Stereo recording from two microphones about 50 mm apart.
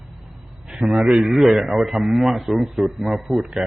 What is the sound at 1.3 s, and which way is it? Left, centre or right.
A man's voice, centre.